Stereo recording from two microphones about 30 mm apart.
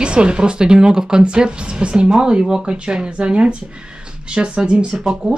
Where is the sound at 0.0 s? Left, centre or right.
Right.